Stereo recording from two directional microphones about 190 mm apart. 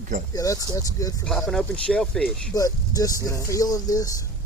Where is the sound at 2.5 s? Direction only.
20° left (ahead or behind).